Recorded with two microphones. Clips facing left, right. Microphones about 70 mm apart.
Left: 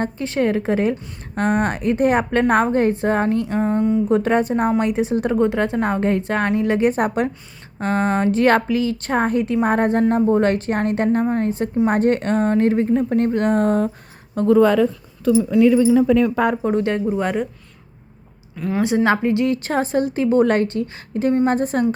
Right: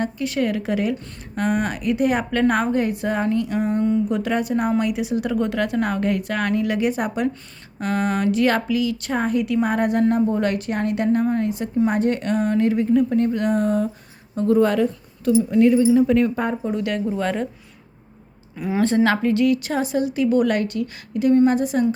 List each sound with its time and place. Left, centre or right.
0.0 s a woman's voice: left
7.8 s a woman's voice: left
14.4 s speech: left
15.5 s speech: left
16.7 s a woman's voice: left
17.2 s a woman's voice: centre
18.5 s a woman's voice: centre
18.8 s a woman's voice: centre
19.6 s a woman's voice: left